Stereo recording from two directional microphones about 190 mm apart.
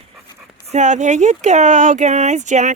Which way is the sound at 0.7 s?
40° right (ahead or behind).